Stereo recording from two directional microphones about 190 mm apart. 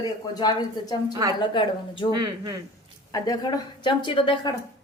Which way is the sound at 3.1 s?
20° left (ahead or behind).